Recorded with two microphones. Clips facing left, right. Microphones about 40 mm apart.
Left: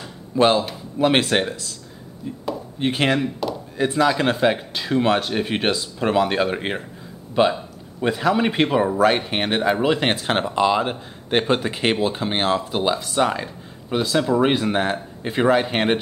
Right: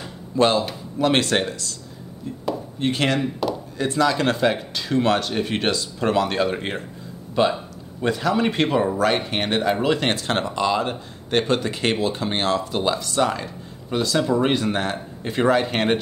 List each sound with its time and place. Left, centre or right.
0.4 s speech: centre
2.8 s speech: centre
3.2 s speech: centre
3.7 s speech: centre